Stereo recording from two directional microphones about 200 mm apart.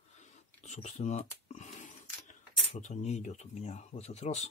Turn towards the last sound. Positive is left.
turn(degrees=35)  # may be behind; listen again after turning